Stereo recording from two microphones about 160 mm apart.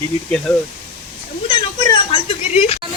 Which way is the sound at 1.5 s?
25° left (ahead or behind).